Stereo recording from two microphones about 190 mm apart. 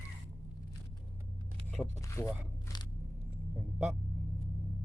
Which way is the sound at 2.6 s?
20° left (ahead or behind).